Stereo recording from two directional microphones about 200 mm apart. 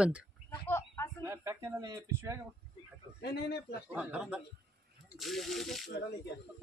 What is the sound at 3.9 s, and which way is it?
Speech, 5° right (ahead or behind).